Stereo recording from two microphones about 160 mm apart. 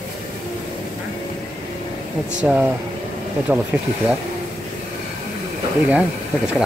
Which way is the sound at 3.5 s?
10° right (ahead or behind).